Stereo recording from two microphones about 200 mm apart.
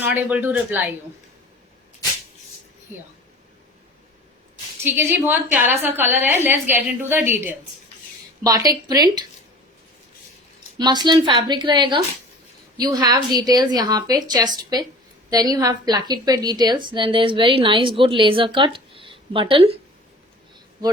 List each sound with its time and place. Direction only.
0.0 s a woman's voice: 10° right (ahead or behind)
4.9 s a woman's voice: 10° right (ahead or behind)
10.8 s a woman's voice: 20° right (ahead or behind)